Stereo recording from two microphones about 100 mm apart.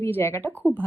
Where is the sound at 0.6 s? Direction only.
20° right (ahead or behind).